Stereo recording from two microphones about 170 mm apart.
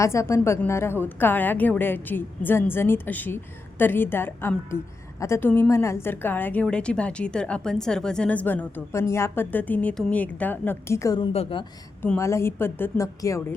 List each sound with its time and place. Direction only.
0.0 s a woman's voice: 15° left (ahead or behind)
11.3 s a woman's voice: 35° left (ahead or behind)
12.0 s a woman's voice: 15° left (ahead or behind)